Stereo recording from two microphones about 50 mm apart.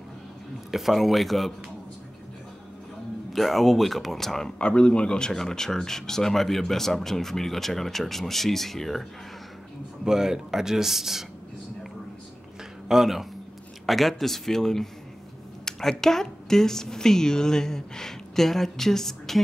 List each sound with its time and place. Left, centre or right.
0.7 s speech: centre
3.3 s speech: centre
10.0 s speech: centre
12.8 s speech: centre